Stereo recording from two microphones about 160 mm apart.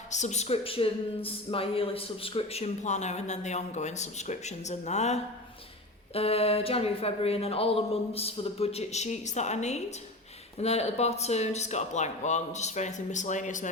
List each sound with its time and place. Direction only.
0.1 s a woman's voice: 45° left (ahead or behind)